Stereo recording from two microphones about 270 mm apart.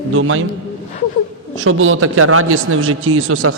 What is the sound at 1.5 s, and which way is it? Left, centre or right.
A man's voice, right.